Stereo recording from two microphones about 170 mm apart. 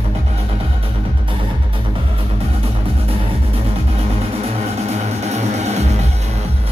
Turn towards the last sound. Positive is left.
turn(degrees=-40)  # may be behind; listen again after turning